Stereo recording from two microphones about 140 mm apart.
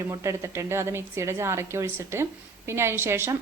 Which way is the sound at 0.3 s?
20° right (ahead or behind).